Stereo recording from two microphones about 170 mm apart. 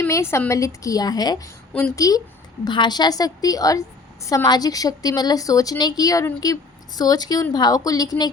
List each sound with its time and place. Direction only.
0.0 s a woman's voice: 15° left (ahead or behind)